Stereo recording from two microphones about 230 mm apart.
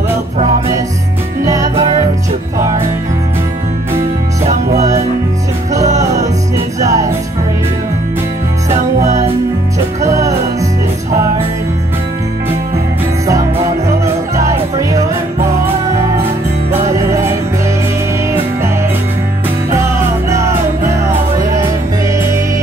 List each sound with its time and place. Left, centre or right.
1.4 s music: centre
6.8 s music: centre
8.6 s music: right
10.0 s music: centre
14.8 s music: centre
16.9 s music: centre
19.7 s music: centre